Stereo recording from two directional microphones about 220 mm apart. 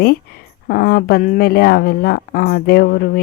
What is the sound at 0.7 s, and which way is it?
Speech, 40° left (ahead or behind).